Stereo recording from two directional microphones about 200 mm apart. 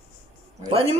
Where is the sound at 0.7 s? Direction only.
30° right (ahead or behind).